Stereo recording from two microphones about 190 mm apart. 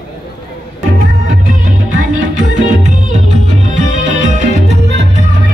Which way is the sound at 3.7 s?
40° right (ahead or behind).